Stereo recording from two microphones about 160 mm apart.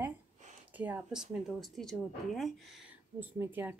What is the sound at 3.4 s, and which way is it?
Speech, 10° right (ahead or behind).